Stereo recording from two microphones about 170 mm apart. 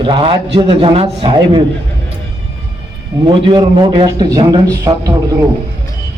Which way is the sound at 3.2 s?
25° right (ahead or behind).